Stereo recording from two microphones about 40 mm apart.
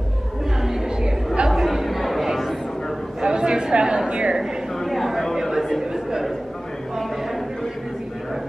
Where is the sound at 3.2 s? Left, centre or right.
Centre.